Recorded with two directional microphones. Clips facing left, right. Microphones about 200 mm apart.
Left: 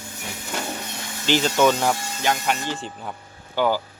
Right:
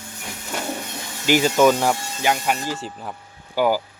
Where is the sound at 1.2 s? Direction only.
10° right (ahead or behind).